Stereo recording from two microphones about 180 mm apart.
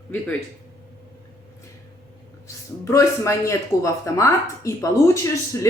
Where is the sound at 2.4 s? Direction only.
15° left (ahead or behind).